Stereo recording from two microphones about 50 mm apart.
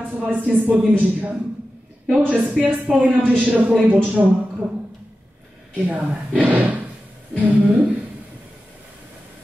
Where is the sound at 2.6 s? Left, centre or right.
Right.